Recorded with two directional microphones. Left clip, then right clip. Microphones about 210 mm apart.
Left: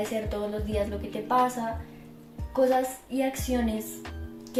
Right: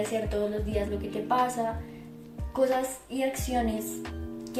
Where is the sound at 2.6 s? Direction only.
Centre (ahead or behind).